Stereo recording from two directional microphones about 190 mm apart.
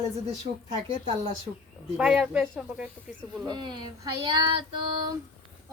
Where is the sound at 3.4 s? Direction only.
25° right (ahead or behind).